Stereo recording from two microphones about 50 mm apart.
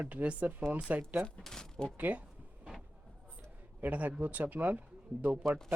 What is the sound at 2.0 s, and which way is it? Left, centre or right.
Speech, right.